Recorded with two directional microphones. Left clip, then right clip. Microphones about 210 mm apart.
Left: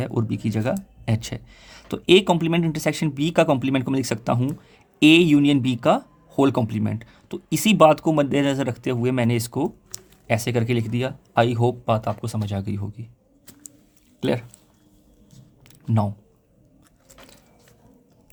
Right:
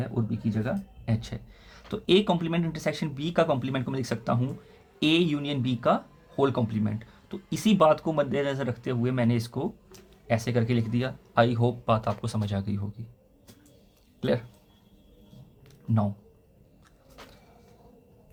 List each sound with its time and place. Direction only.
0.0 s speech: 45° left (ahead or behind)
14.2 s speech: 40° left (ahead or behind)